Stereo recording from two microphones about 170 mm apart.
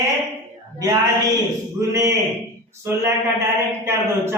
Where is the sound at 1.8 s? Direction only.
15° right (ahead or behind).